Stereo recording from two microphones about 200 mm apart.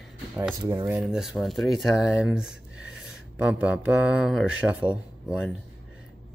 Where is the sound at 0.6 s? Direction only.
20° right (ahead or behind).